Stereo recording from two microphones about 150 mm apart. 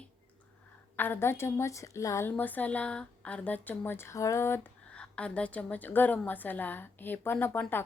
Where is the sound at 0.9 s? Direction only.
15° left (ahead or behind).